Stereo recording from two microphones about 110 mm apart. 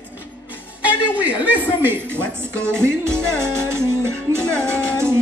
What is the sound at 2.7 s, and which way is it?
Music, 25° right (ahead or behind).